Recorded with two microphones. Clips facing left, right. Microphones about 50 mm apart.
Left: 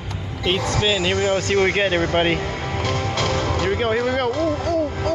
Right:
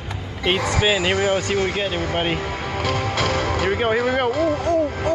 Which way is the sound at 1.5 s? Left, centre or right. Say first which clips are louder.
Left 4 dB; centre.